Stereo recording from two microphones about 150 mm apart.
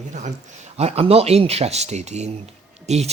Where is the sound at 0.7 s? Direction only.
45° right (ahead or behind).